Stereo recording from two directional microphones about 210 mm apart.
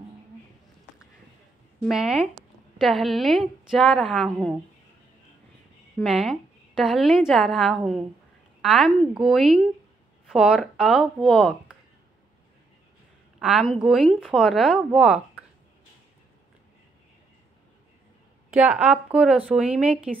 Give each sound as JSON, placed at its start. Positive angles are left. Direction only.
{"t": 1.8, "sound": "a woman's voice", "side_deg": -5}
{"t": 5.9, "sound": "a woman's voice", "side_deg": 0}
{"t": 13.4, "sound": "a woman's voice", "side_deg": -5}
{"t": 18.5, "sound": "speech", "side_deg": -5}